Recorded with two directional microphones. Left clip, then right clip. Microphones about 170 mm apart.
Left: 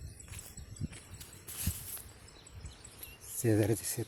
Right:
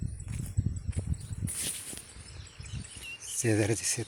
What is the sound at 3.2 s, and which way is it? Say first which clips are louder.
Speech: right 2 dB; 10° right (ahead or behind).